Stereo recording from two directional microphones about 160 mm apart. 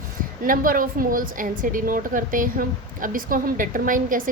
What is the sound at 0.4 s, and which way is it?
A woman's voice, 60° right (ahead or behind).